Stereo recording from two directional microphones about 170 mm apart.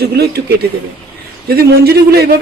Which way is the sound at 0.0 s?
70° right (ahead or behind).